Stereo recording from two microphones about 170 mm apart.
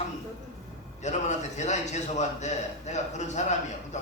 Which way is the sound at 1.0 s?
45° left (ahead or behind).